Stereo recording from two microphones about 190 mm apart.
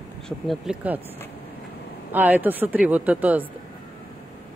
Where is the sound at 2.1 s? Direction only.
10° right (ahead or behind).